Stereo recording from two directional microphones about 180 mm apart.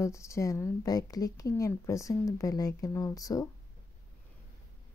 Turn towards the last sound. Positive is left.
turn(degrees=20)  # may be behind; listen again after turning